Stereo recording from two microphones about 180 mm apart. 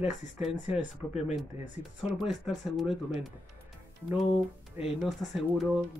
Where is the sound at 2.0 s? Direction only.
Centre (ahead or behind).